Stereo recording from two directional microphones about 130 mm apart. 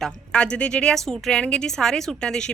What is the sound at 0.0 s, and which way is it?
A woman's voice, 5° left (ahead or behind).